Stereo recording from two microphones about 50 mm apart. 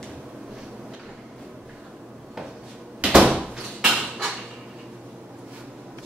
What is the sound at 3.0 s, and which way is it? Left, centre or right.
Door, centre.